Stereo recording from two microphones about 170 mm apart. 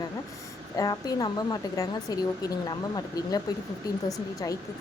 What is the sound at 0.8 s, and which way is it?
A woman's voice, 20° left (ahead or behind).